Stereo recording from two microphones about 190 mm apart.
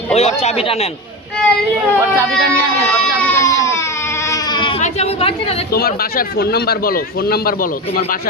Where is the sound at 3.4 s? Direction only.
15° left (ahead or behind).